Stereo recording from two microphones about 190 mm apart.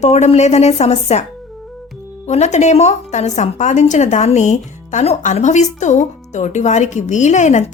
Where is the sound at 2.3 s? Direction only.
35° left (ahead or behind).